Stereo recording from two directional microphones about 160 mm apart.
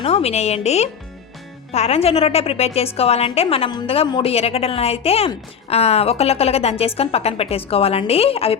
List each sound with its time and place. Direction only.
0.0 s a woman's voice: 40° left (ahead or behind)